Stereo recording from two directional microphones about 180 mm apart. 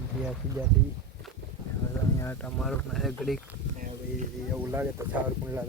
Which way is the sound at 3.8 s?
45° right (ahead or behind).